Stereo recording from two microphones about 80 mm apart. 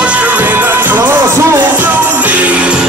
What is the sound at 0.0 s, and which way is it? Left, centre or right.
Music, centre.